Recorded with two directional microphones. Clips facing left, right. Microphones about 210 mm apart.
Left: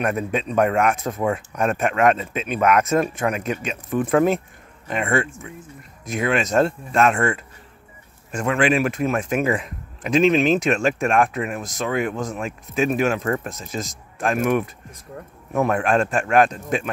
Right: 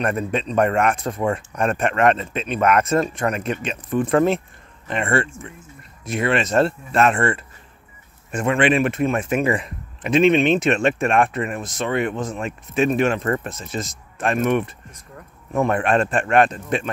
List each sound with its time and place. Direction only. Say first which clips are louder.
0.0 s a man's voice: even; 5° left (ahead or behind)